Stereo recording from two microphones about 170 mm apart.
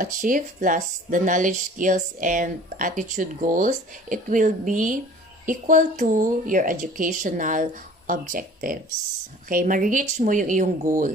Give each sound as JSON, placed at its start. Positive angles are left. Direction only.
{"t": 0.0, "sound": "speech", "side_deg": -50}